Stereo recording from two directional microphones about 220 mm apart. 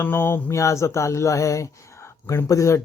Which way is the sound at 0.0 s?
10° left (ahead or behind).